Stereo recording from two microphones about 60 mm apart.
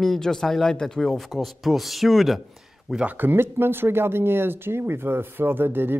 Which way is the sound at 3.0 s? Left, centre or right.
Right.